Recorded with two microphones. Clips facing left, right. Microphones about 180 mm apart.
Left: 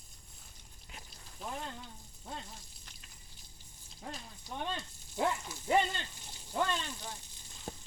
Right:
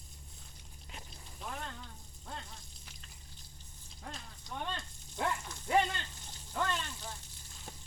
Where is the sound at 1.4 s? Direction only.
5° left (ahead or behind).